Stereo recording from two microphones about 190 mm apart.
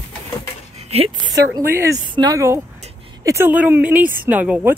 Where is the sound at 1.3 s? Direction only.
15° right (ahead or behind).